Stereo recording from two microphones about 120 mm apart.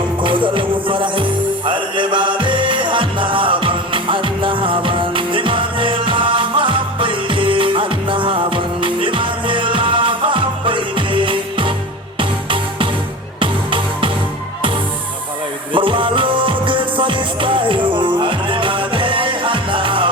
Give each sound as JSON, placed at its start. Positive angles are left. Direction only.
{"t": 0.2, "sound": "music", "side_deg": -45}
{"t": 13.4, "sound": "music", "side_deg": -45}
{"t": 15.7, "sound": "music", "side_deg": -45}